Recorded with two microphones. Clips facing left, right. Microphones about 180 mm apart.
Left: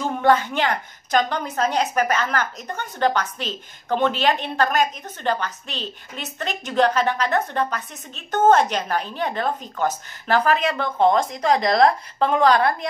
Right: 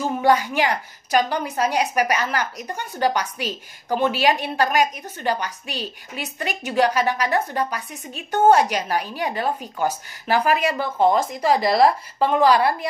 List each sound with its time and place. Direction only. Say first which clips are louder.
0.0 s a woman's voice: even; 10° right (ahead or behind)